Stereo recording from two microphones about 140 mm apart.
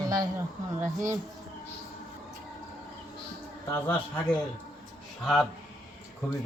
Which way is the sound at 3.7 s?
15° left (ahead or behind).